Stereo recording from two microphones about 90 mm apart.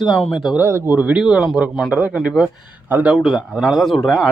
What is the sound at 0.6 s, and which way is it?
Speech, 25° right (ahead or behind).